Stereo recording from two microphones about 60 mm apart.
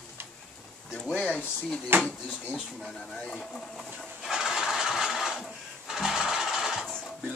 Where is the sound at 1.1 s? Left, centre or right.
Centre.